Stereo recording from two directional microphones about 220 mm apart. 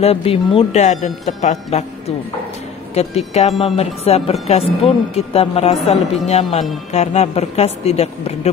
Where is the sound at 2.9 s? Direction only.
30° left (ahead or behind).